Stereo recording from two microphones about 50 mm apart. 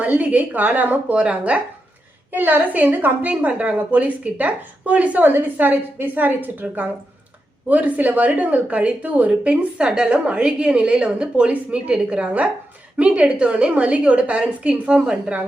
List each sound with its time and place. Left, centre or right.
0.2 s speech: right
2.3 s a woman's voice: right
5.2 s a woman's voice: right